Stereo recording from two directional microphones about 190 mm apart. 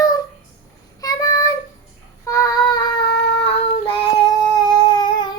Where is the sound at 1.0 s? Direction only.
20° left (ahead or behind).